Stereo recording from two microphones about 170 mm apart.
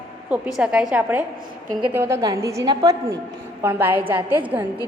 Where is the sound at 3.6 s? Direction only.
10° right (ahead or behind).